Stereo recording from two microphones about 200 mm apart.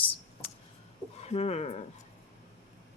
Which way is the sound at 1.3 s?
30° left (ahead or behind).